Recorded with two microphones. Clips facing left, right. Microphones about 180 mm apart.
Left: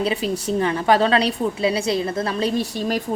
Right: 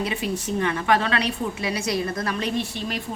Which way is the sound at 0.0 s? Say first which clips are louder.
Left 4 dB; 35° left (ahead or behind).